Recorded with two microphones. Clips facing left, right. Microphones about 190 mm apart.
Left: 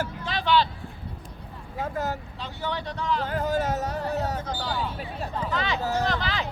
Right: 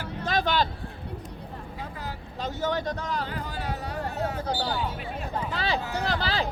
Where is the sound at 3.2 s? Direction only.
45° left (ahead or behind).